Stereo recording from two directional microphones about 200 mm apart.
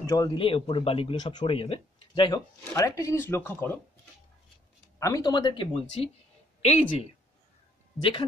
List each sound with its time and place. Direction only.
0.0 s speech: 15° left (ahead or behind)
4.9 s speech: 15° left (ahead or behind)